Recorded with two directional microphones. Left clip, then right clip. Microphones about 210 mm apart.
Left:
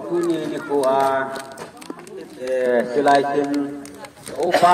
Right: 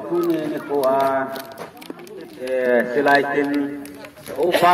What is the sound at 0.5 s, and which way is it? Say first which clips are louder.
Speech: left 1 dB; 30° left (ahead or behind).